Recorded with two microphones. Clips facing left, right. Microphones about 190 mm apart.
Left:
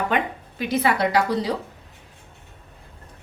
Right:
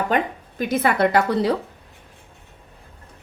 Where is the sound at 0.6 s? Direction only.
50° right (ahead or behind).